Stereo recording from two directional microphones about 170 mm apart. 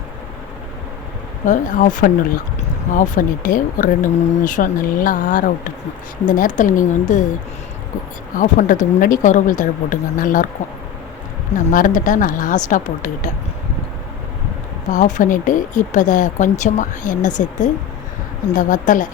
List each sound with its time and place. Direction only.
1.5 s speech: 50° left (ahead or behind)
8.4 s speech: 50° left (ahead or behind)
11.5 s speech: 50° left (ahead or behind)
14.8 s speech: 45° left (ahead or behind)